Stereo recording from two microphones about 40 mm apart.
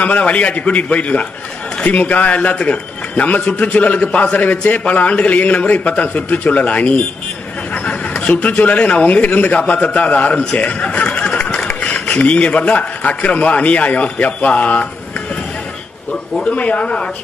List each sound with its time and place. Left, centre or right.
0.0 s a man's voice: left
7.7 s a sound: left
8.3 s a man's voice: left
12.1 s a man's voice: left
16.4 s speech: left